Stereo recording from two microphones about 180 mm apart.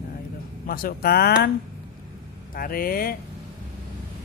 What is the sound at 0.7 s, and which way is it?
Speech, 55° left (ahead or behind).